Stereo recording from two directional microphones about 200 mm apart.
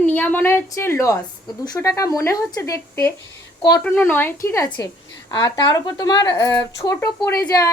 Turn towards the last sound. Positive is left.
turn(degrees=15)  # may be behind; listen again after turning